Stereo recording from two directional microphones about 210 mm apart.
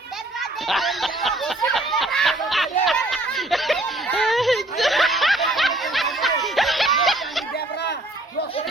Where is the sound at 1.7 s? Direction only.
Centre (ahead or behind).